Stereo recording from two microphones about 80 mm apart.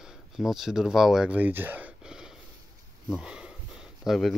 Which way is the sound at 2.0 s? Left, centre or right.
Centre.